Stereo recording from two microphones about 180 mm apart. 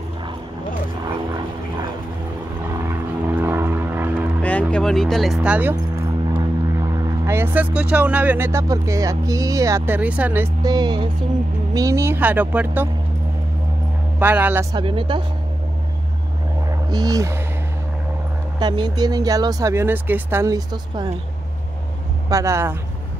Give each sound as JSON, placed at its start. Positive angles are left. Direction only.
{"t": 2.7, "sound": "vehicle", "side_deg": -15}
{"t": 4.4, "sound": "speech", "side_deg": 10}
{"t": 7.2, "sound": "speech", "side_deg": -10}
{"t": 14.2, "sound": "speech", "side_deg": -10}
{"t": 14.8, "sound": "speech", "side_deg": -30}
{"t": 16.9, "sound": "speech", "side_deg": -20}
{"t": 18.6, "sound": "speech", "side_deg": -25}
{"t": 22.3, "sound": "speech", "side_deg": -15}